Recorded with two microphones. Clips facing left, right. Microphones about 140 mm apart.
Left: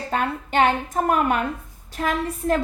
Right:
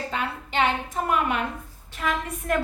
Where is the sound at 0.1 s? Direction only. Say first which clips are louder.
Left 6 dB; 50° left (ahead or behind).